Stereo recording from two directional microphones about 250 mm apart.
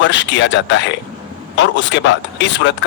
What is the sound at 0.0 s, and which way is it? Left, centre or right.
Speech, left.